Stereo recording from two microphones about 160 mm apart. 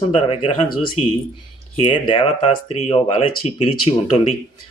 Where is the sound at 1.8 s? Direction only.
30° left (ahead or behind).